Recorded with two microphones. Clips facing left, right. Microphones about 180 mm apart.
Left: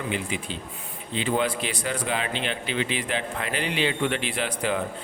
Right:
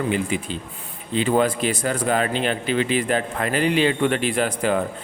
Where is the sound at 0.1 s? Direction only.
45° right (ahead or behind).